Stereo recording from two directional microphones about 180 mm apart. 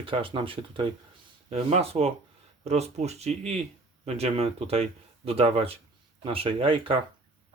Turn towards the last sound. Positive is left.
turn(degrees=-30)  # may be behind; listen again after turning